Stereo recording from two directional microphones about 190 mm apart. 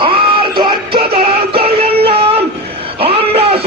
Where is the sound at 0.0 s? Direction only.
25° right (ahead or behind).